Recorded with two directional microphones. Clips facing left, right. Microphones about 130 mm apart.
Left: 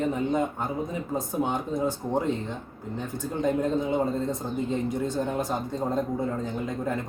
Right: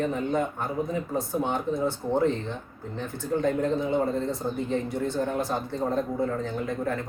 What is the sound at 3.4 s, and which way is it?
Speech, 20° left (ahead or behind).